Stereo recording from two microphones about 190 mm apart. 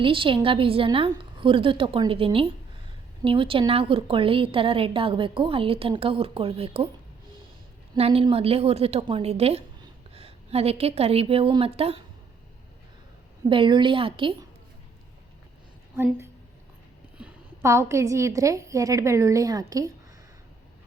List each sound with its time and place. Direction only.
0.0 s a woman's voice: 25° right (ahead or behind)
7.9 s a woman's voice: 30° right (ahead or behind)
13.5 s a woman's voice: 25° right (ahead or behind)
17.2 s a woman's voice: 10° right (ahead or behind)